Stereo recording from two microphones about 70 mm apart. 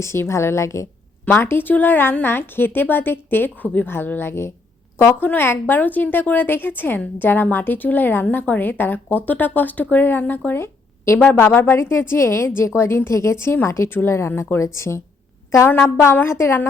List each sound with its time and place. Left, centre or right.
0.0 s a woman's voice: left